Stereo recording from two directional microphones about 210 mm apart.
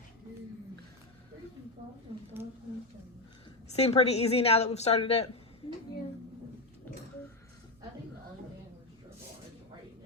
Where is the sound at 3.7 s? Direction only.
30° left (ahead or behind).